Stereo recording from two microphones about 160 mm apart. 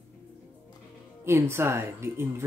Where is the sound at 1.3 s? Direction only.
15° right (ahead or behind).